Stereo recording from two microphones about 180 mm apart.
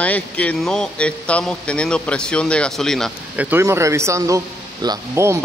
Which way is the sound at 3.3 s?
15° right (ahead or behind).